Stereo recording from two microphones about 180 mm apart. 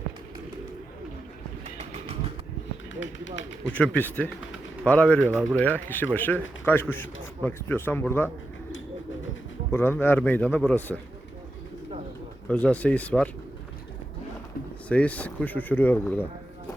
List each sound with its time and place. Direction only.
1.6 s bird: 35° right (ahead or behind)
2.9 s speech: 90° left
3.6 s speech: 5° left (ahead or behind)
9.7 s speech: 10° left (ahead or behind)
12.5 s speech: 5° left (ahead or behind)
14.8 s speech: 5° left (ahead or behind)